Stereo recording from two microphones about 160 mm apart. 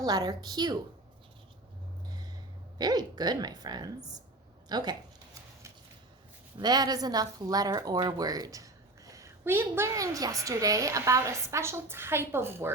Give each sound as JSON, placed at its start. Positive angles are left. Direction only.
{"t": 0.0, "sound": "a woman's voice", "side_deg": -25}
{"t": 2.7, "sound": "a woman's voice", "side_deg": -25}
{"t": 6.6, "sound": "a woman's voice", "side_deg": -25}